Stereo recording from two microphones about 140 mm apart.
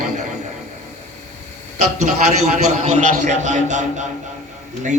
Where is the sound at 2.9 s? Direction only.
60° right (ahead or behind).